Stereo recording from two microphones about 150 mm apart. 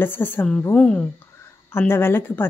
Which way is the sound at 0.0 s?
15° left (ahead or behind).